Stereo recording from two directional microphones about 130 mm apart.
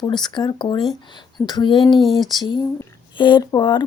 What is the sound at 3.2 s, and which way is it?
Speech, 35° left (ahead or behind).